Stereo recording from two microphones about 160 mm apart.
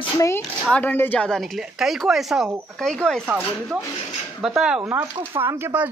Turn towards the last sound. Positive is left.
turn(degrees=-15)  # may be behind; listen again after turning